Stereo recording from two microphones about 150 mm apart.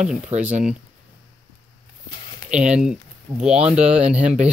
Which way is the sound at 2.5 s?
5° right (ahead or behind).